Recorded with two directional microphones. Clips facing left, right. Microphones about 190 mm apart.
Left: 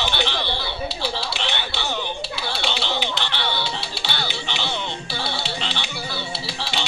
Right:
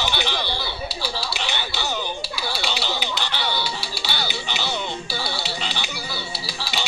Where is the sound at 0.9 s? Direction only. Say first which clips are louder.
Left 2 dB; 25° left (ahead or behind).